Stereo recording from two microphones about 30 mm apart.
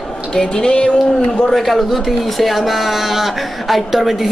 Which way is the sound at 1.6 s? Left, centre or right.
Centre.